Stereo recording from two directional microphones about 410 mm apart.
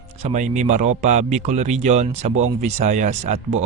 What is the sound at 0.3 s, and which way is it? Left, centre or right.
Speech, centre.